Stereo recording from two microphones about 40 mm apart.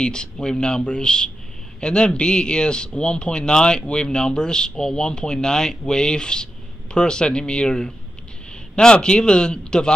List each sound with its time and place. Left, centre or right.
0.0 s a man's voice: left